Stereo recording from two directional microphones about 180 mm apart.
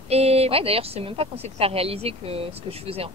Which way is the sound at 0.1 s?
35° right (ahead or behind).